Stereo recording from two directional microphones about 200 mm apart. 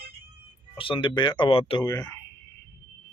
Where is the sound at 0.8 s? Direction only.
25° left (ahead or behind).